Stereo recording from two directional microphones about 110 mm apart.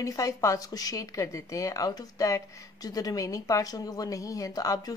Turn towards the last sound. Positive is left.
turn(degrees=35)  # may be behind; listen again after turning